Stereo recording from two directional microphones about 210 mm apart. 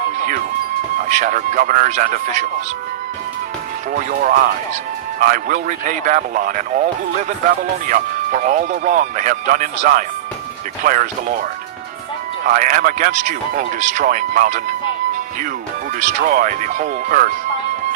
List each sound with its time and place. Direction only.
0.9 s speech: 40° right (ahead or behind)
4.1 s speech: 40° right (ahead or behind)
12.5 s speech: 40° right (ahead or behind)
16.0 s speech: 40° right (ahead or behind)